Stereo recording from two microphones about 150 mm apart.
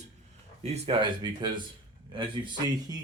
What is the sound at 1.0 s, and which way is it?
Speech, 30° right (ahead or behind).